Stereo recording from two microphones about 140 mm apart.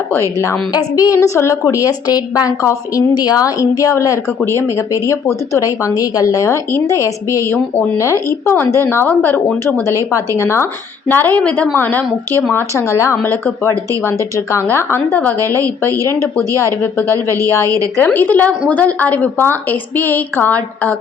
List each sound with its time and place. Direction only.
0.1 s a woman's voice: 20° left (ahead or behind)
5.5 s a woman's voice: 25° left (ahead or behind)
15.4 s a woman's voice: 20° right (ahead or behind)
16.5 s a woman's voice: 20° left (ahead or behind)